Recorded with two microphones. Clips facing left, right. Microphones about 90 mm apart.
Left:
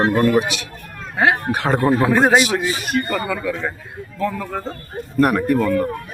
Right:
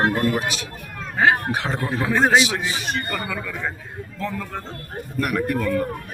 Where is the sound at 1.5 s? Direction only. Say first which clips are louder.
Left 7 dB; 55° left (ahead or behind).